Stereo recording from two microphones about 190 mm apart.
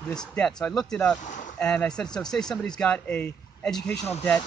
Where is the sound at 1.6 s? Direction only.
5° left (ahead or behind).